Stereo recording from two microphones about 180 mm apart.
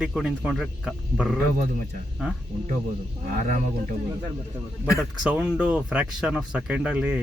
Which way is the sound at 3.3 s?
50° right (ahead or behind).